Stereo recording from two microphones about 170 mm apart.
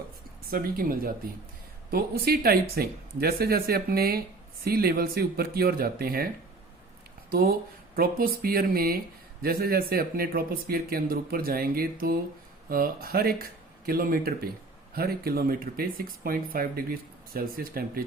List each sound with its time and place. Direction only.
0.5 s speech: 60° right (ahead or behind)
7.3 s speech: 60° right (ahead or behind)